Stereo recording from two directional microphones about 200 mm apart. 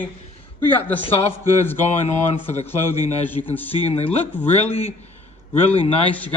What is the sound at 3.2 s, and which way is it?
Speech, 10° left (ahead or behind).